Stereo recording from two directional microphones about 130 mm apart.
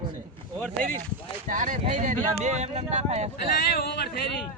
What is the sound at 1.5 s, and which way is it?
Speech, 80° right.